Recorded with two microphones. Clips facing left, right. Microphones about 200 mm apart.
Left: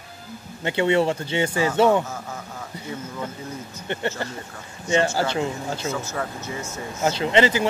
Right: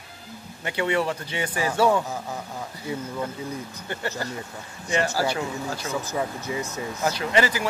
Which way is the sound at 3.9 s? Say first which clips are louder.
Left 4 dB; 25° left (ahead or behind).